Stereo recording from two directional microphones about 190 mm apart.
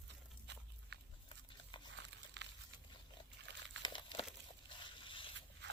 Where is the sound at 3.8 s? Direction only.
25° left (ahead or behind).